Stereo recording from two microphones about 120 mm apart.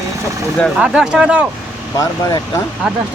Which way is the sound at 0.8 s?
5° right (ahead or behind).